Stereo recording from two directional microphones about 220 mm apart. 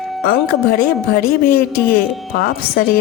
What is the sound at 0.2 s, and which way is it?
A woman's voice, 40° left (ahead or behind).